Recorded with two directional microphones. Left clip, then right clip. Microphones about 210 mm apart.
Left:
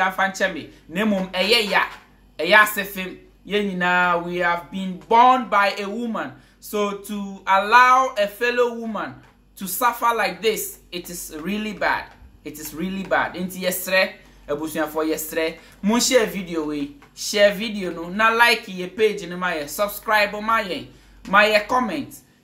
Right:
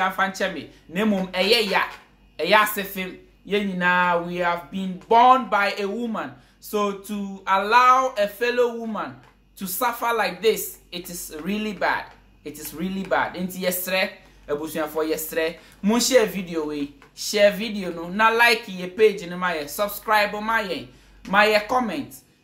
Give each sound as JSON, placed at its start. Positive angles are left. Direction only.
{"t": 0.0, "sound": "speech", "side_deg": 0}